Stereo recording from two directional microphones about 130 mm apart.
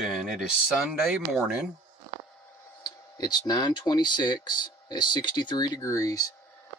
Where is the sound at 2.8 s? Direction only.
30° left (ahead or behind).